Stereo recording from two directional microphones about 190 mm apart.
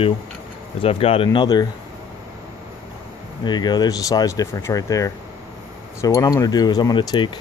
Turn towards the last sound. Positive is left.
turn(degrees=25)  # may be behind; listen again after turning